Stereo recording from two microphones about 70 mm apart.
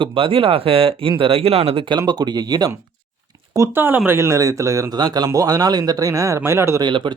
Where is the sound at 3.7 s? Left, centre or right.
Right.